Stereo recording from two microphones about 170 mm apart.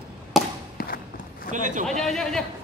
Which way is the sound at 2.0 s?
Centre (ahead or behind).